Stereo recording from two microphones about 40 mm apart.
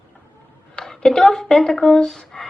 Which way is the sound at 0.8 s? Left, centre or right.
Centre.